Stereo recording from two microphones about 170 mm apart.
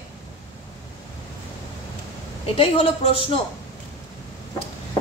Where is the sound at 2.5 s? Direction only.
35° left (ahead or behind).